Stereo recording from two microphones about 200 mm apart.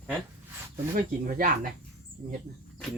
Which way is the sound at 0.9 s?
45° right (ahead or behind).